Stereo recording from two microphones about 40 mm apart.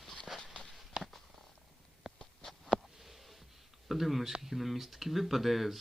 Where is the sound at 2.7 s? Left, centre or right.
Centre.